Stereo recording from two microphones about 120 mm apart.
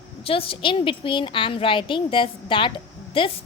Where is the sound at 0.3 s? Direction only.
50° left (ahead or behind).